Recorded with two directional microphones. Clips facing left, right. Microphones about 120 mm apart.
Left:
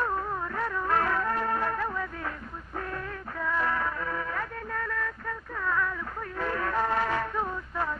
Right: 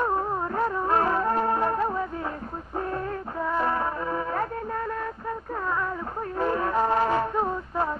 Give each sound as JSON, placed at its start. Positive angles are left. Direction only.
{"t": 0.0, "sound": "music", "side_deg": -30}